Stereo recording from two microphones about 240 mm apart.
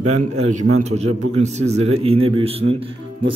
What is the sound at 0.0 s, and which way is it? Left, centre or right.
Speech, right.